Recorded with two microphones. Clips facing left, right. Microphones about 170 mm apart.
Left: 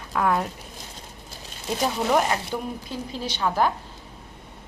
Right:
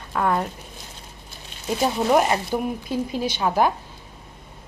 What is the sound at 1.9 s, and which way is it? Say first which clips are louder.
Speech: right 3 dB; 15° right (ahead or behind).